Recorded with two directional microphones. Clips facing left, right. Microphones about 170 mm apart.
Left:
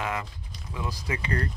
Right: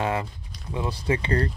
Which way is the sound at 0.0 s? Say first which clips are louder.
Right 5 dB; 30° right (ahead or behind).